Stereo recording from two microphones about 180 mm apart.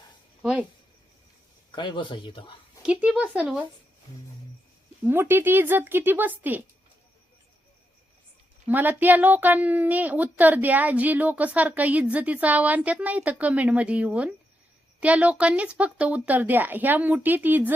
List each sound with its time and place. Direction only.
1.7 s speech: 25° left (ahead or behind)
2.8 s speech: 5° right (ahead or behind)
5.0 s speech: 10° right (ahead or behind)
8.6 s speech: 10° right (ahead or behind)